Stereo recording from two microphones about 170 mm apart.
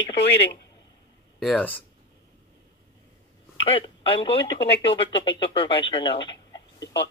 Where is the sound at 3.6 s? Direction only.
30° left (ahead or behind).